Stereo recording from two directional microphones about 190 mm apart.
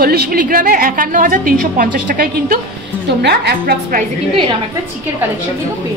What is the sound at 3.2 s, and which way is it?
Speech, 60° right (ahead or behind).